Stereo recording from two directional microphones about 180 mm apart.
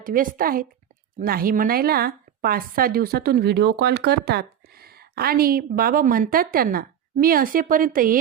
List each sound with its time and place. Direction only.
0.0 s a woman's voice: 50° right (ahead or behind)